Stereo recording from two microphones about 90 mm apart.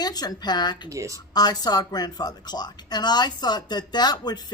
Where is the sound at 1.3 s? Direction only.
50° left (ahead or behind).